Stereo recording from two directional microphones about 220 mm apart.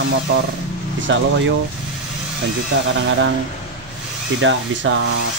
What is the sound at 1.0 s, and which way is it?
Speech, 55° right (ahead or behind).